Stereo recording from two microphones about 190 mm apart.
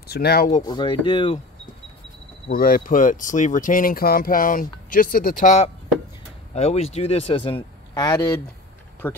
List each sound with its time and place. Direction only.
0.1 s speech: 55° left (ahead or behind)
0.6 s speech: 25° left (ahead or behind)
2.5 s speech: 50° left (ahead or behind); by 8.3 s 20° left (ahead or behind)
9.0 s speech: 10° left (ahead or behind)